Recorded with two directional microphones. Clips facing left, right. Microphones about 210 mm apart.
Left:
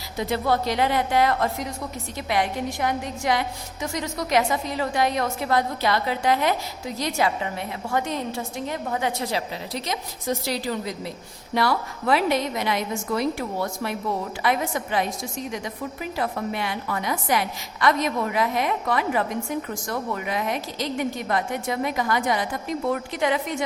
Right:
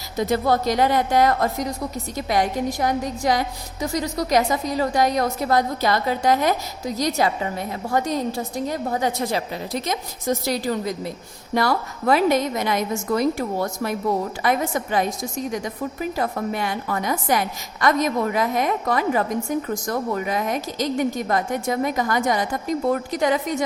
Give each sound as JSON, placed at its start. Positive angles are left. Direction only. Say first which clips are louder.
{"t": 0.2, "sound": "a woman's voice", "louder": "right 3 dB", "side_deg": -40}